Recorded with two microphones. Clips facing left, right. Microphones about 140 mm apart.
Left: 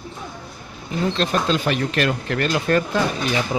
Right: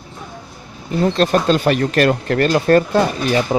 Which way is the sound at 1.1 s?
45° right (ahead or behind).